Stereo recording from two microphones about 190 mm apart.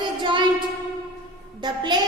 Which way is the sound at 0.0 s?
25° right (ahead or behind).